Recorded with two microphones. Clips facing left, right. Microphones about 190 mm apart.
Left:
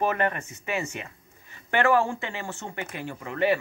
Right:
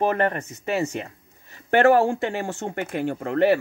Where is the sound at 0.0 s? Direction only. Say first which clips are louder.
Right 4 dB; 40° right (ahead or behind).